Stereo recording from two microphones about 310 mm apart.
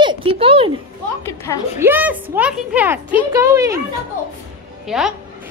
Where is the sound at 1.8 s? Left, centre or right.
Centre.